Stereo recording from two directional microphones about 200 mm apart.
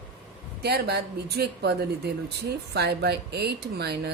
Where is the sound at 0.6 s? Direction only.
55° right (ahead or behind).